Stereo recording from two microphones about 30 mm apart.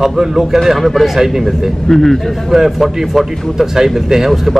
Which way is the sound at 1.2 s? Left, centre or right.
Centre.